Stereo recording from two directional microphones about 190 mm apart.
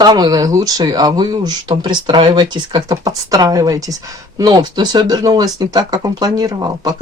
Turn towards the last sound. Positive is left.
turn(degrees=-20)  # may be behind; listen again after turning